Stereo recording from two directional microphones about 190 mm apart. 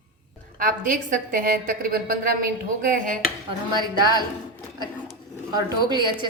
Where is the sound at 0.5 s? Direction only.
45° right (ahead or behind).